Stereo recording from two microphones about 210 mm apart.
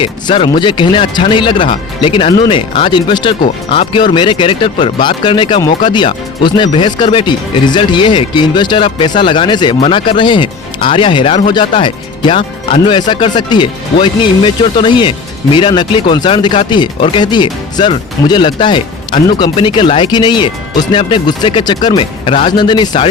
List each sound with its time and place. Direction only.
0.0 s speech: 25° left (ahead or behind)